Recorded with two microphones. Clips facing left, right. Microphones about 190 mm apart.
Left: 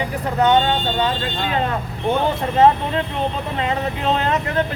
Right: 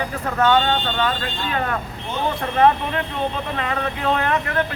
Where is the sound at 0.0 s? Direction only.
20° left (ahead or behind).